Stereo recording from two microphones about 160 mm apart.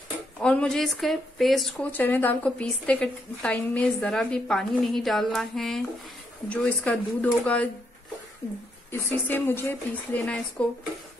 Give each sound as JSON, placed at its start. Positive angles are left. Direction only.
{"t": 0.4, "sound": "speech", "side_deg": 5}
{"t": 8.9, "sound": "speech", "side_deg": 15}